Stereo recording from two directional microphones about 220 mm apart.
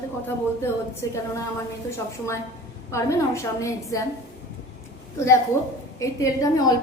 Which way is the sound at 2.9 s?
15° left (ahead or behind).